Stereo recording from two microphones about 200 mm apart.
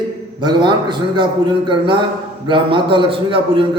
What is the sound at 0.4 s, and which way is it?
A man's voice, 25° right (ahead or behind).